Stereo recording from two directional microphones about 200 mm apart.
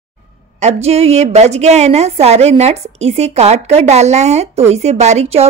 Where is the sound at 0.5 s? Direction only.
30° right (ahead or behind).